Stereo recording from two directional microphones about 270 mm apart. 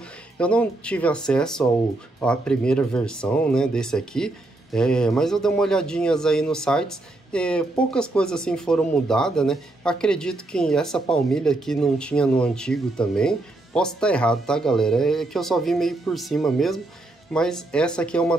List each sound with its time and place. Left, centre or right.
0.4 s speech: centre